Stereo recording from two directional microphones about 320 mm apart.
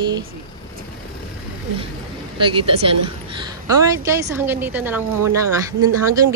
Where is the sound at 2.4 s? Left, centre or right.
Centre.